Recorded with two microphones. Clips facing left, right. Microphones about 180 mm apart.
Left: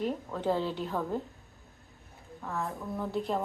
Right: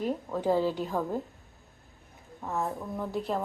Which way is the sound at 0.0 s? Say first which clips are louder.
Right 2 dB; 10° right (ahead or behind).